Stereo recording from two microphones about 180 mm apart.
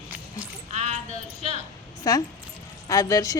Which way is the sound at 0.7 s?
40° right (ahead or behind).